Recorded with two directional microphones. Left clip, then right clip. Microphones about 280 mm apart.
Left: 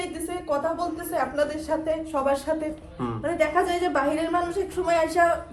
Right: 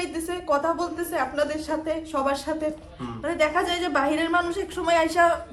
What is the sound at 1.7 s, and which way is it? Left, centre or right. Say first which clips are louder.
A woman's voice: left 2 dB; centre.